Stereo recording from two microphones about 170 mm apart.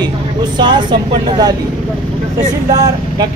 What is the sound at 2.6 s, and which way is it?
Speech, 20° right (ahead or behind).